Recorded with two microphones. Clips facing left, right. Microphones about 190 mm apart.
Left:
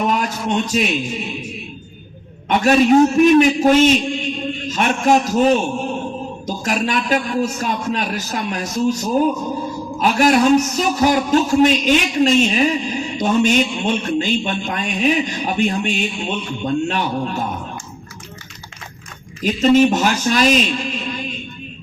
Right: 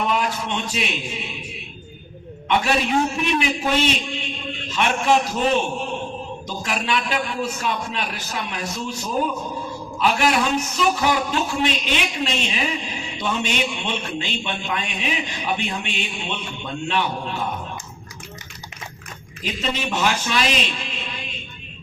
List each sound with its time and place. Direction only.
0.0 s a man's voice: 45° left (ahead or behind)
2.5 s a man's voice: 45° left (ahead or behind)
19.4 s a man's voice: 45° left (ahead or behind)